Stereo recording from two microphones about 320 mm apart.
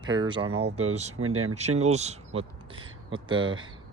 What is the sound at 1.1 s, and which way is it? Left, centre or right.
Speech, right.